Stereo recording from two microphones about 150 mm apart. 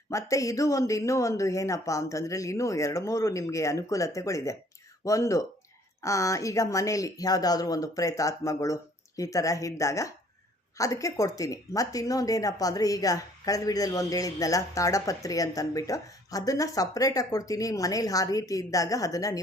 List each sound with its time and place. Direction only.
0.1 s speech: 20° left (ahead or behind)